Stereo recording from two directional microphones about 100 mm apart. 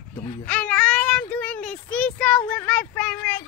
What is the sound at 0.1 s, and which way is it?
Speech, 70° left (ahead or behind).